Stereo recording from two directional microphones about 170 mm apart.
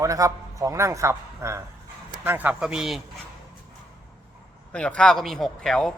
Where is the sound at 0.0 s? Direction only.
20° right (ahead or behind); by 3.0 s 5° right (ahead or behind).